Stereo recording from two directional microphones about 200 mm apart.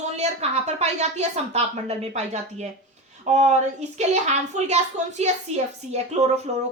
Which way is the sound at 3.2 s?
35° right (ahead or behind).